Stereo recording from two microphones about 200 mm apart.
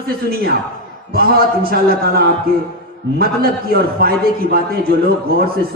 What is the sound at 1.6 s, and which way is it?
A man's voice, 50° right (ahead or behind).